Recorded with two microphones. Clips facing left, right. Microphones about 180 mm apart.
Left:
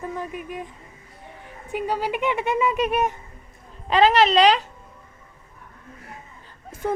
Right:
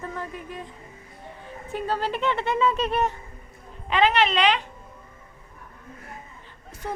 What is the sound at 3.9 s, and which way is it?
Speech, 35° left (ahead or behind).